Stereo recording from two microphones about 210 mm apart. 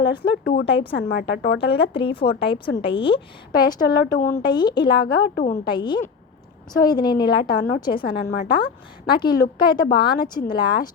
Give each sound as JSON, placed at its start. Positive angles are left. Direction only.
{"t": 0.1, "sound": "a woman's voice", "side_deg": 20}
{"t": 1.3, "sound": "speech", "side_deg": 45}
{"t": 1.6, "sound": "a woman's voice", "side_deg": 25}
{"t": 5.2, "sound": "a woman's voice", "side_deg": 40}
{"t": 5.6, "sound": "a woman's voice", "side_deg": 20}